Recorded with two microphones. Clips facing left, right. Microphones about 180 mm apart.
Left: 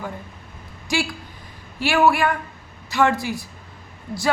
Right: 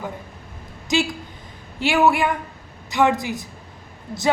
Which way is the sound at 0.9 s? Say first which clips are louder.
Right 3 dB; 20° right (ahead or behind).